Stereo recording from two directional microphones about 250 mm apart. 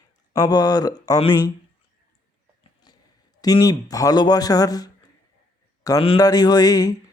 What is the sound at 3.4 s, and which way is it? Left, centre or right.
Speech, centre.